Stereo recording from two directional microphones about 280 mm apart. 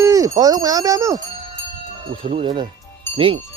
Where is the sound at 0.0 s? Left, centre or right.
Centre.